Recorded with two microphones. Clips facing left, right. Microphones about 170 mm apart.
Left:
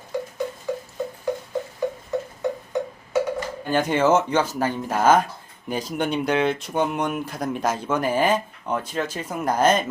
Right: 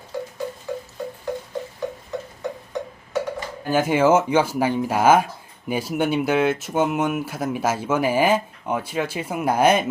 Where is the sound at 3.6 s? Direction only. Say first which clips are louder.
Right 2 dB; 5° right (ahead or behind).